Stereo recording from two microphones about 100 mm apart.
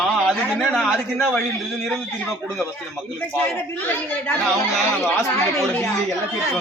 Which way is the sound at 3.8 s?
20° left (ahead or behind).